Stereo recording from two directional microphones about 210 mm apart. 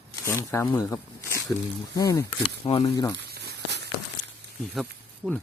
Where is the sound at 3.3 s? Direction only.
50° right (ahead or behind).